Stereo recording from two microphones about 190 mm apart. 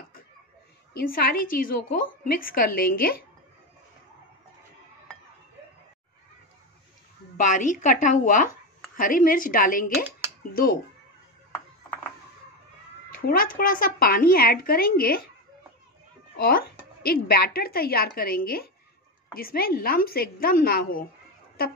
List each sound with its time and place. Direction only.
0.9 s speech: 50° left (ahead or behind)
7.3 s speech: 40° left (ahead or behind)
13.1 s speech: 50° left (ahead or behind)
16.3 s speech: 50° left (ahead or behind)